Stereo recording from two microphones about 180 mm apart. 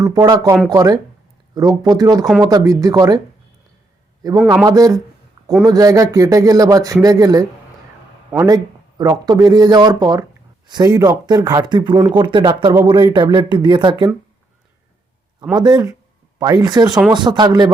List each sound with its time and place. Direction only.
0.0 s speech: 20° right (ahead or behind)
4.6 s speech: 20° right (ahead or behind)
15.5 s speech: 20° right (ahead or behind)